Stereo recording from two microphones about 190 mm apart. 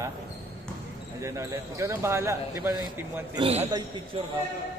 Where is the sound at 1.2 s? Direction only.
15° right (ahead or behind).